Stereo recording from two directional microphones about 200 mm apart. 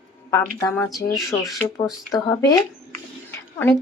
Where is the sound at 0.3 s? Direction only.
15° left (ahead or behind).